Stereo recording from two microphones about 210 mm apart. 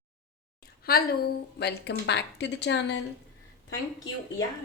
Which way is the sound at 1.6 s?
50° left (ahead or behind).